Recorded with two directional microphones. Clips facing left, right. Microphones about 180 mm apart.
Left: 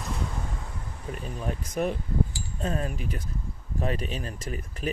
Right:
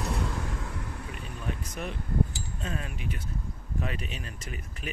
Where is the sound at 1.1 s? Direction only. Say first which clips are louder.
Left 7 dB; 40° left (ahead or behind).